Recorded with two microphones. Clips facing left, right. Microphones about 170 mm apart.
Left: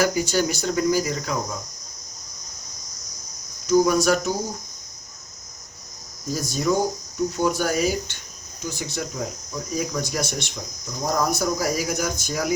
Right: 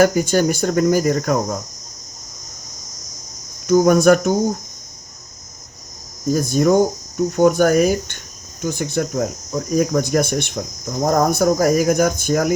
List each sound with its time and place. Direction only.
0.0 s cricket: 50° right (ahead or behind)
3.7 s speech: 55° right (ahead or behind)
6.3 s cricket: 55° right (ahead or behind)
7.3 s speech: 55° right (ahead or behind)
8.6 s cricket: 55° right (ahead or behind)